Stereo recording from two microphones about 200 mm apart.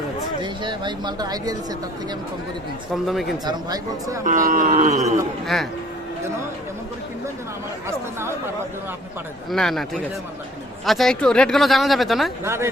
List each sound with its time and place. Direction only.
0.4 s speech: 25° right (ahead or behind)
2.9 s speech: centre (ahead or behind)
3.4 s speech: 15° right (ahead or behind)
4.3 s livestock: 40° right (ahead or behind)
5.5 s speech: centre (ahead or behind)
7.9 s speech: 10° right (ahead or behind)
9.5 s speech: centre (ahead or behind)
12.5 s speech: 10° right (ahead or behind)